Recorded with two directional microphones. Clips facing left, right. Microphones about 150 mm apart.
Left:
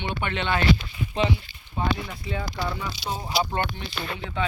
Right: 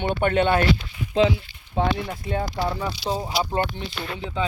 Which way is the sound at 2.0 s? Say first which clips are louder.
Right 5 dB; 45° right (ahead or behind).